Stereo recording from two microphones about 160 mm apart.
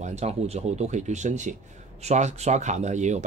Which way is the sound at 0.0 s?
45° right (ahead or behind).